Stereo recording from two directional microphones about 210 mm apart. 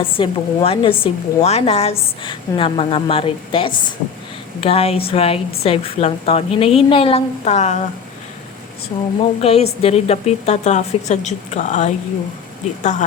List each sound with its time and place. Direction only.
0.0 s a woman's voice: 25° left (ahead or behind)
8.9 s a woman's voice: 25° left (ahead or behind)